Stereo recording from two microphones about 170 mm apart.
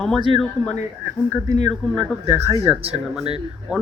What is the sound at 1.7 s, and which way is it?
Speech, centre (ahead or behind).